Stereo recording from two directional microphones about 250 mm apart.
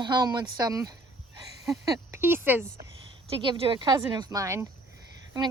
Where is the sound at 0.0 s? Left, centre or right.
Centre.